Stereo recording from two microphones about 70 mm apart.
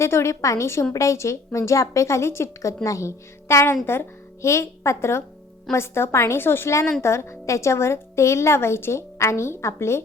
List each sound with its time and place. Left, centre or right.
0.0 s a woman's voice: left